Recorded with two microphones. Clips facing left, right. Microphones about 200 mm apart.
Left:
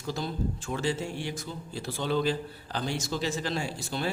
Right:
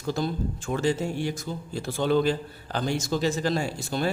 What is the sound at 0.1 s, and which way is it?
A man's voice, 50° right (ahead or behind).